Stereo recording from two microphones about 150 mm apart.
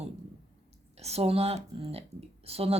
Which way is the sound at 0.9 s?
45° right (ahead or behind).